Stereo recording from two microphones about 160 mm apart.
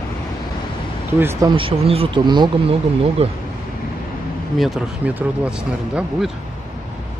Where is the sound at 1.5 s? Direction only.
35° right (ahead or behind).